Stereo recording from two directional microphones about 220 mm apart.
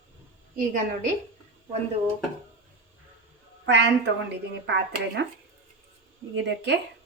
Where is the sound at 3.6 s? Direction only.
55° right (ahead or behind).